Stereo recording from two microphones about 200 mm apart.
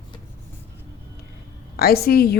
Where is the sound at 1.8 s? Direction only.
50° left (ahead or behind).